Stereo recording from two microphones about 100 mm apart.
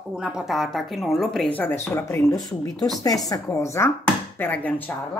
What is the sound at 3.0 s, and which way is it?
Speech, 35° left (ahead or behind).